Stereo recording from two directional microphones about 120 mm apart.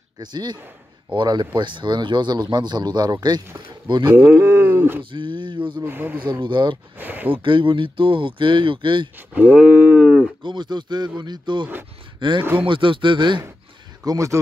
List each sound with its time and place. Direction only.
0.2 s speech: 35° right (ahead or behind)
4.1 s a sound: 20° right (ahead or behind)
5.1 s a sound: 40° right (ahead or behind)
5.8 s speech: 15° right (ahead or behind)
6.2 s speech: 40° right (ahead or behind)
7.0 s speech: 15° right (ahead or behind)
7.4 s speech: 45° right (ahead or behind)
9.3 s a sound: 15° right (ahead or behind)
10.4 s a man's voice: 40° right (ahead or behind)
14.0 s speech: 25° right (ahead or behind)